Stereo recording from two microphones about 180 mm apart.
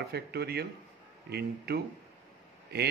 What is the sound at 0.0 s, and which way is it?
A man's voice, 65° right (ahead or behind).